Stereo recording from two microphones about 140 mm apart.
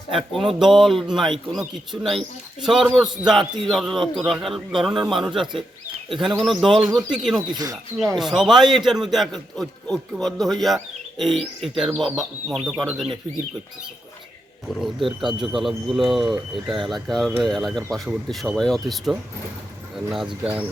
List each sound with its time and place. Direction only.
0.2 s speech: centre (ahead or behind)
7.4 s speech: 30° right (ahead or behind)
8.1 s speech: centre (ahead or behind)
14.8 s speech: centre (ahead or behind)